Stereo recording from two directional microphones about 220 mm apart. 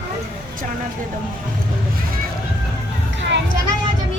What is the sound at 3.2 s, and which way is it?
Children playing, 55° right (ahead or behind).